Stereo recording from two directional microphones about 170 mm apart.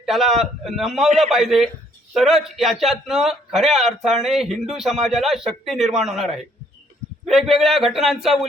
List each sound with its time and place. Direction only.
0.0 s a man's voice: centre (ahead or behind)